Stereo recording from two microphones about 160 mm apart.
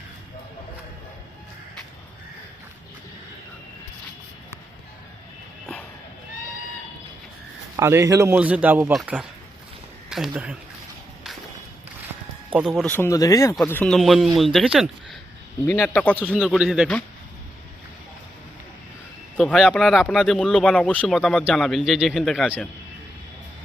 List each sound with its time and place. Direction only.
7.8 s a man's voice: 20° right (ahead or behind)
12.5 s speech: 5° right (ahead or behind)
12.8 s speech: 10° left (ahead or behind)
13.8 s speech: centre (ahead or behind)
15.6 s speech: 15° left (ahead or behind); by 17.0 s centre (ahead or behind)
19.4 s speech: 5° left (ahead or behind)